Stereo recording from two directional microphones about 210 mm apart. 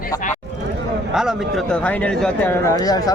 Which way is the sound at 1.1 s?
Centre (ahead or behind).